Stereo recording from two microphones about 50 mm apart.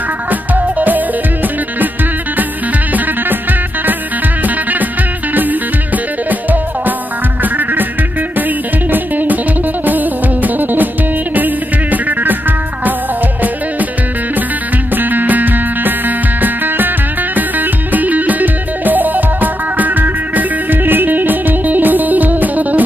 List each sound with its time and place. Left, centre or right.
0.3 s music: right
4.4 s music: right
7.4 s music: right
8.9 s music: right
15.0 s music: right